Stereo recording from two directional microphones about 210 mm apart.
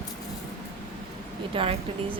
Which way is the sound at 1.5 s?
25° right (ahead or behind).